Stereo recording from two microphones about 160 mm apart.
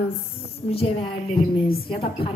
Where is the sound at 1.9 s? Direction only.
35° left (ahead or behind).